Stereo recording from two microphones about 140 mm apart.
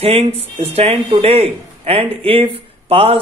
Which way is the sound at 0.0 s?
45° right (ahead or behind).